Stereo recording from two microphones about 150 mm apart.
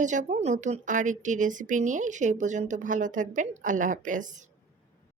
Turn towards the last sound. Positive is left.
turn(degrees=-55)  # may be behind; listen again after turning